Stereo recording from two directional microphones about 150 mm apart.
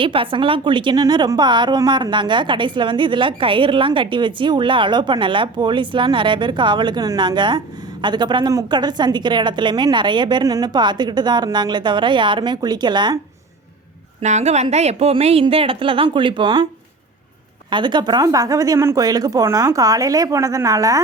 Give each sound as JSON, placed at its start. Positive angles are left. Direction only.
{"t": 0.0, "sound": "a woman's voice", "side_deg": -35}
{"t": 14.2, "sound": "a woman's voice", "side_deg": -50}
{"t": 17.7, "sound": "a woman's voice", "side_deg": -30}